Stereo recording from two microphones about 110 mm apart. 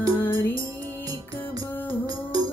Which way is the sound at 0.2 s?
20° left (ahead or behind).